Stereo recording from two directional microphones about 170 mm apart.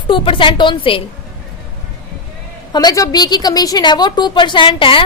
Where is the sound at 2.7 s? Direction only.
20° left (ahead or behind).